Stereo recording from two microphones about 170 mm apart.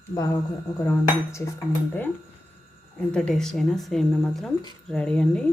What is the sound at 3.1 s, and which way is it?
Speech, 5° left (ahead or behind).